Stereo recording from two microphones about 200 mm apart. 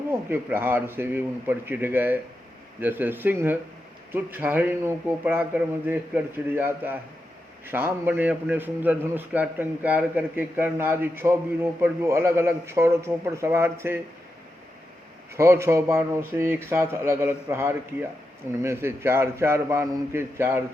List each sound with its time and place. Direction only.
0.1 s a man's voice: 10° right (ahead or behind)
15.4 s a man's voice: 15° right (ahead or behind)